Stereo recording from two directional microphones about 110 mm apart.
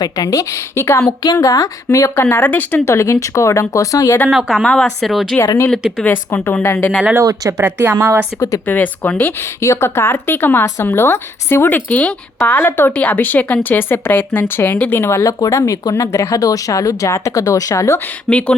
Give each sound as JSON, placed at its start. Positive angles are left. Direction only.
{"t": 0.0, "sound": "speech", "side_deg": 35}
{"t": 2.2, "sound": "speech", "side_deg": 15}
{"t": 2.8, "sound": "speech", "side_deg": 25}
{"t": 4.3, "sound": "a woman's voice", "side_deg": 0}
{"t": 6.0, "sound": "speech", "side_deg": 15}
{"t": 7.2, "sound": "speech", "side_deg": -30}
{"t": 8.4, "sound": "speech", "side_deg": 30}
{"t": 8.6, "sound": "speech", "side_deg": 15}
{"t": 18.3, "sound": "speech", "side_deg": 10}